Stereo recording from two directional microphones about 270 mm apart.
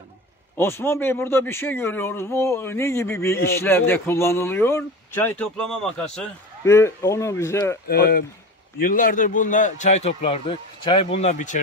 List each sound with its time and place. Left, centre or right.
0.6 s speech: centre
7.9 s a man's voice: left